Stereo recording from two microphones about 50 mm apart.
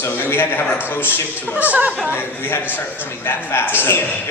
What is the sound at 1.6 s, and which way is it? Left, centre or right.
Speech, right.